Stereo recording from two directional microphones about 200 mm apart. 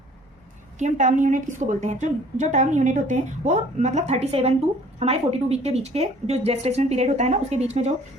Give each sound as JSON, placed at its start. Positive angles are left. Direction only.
{"t": 0.8, "sound": "a woman's voice", "side_deg": -35}